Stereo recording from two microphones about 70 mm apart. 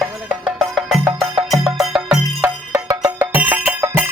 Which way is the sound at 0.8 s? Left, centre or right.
Centre.